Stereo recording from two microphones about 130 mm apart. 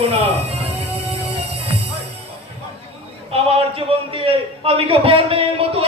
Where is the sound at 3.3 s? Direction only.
50° right (ahead or behind).